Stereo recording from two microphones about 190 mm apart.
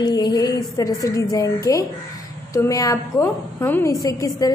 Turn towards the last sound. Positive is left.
turn(degrees=15)  # may be behind; listen again after turning